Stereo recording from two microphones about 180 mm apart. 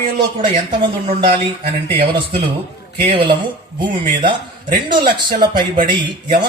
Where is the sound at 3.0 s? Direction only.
30° right (ahead or behind).